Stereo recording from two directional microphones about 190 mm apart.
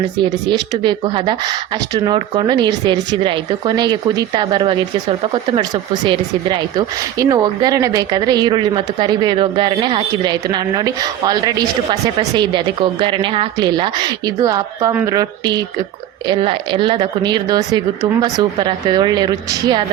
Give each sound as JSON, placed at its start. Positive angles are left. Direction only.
{"t": 0.7, "sound": "a woman's voice", "side_deg": -25}